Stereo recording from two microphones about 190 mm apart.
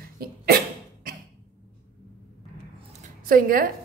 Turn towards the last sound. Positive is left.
turn(degrees=-50)  # may be behind; listen again after turning